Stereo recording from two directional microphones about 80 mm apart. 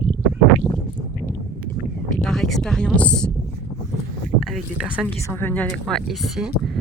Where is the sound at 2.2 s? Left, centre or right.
Centre.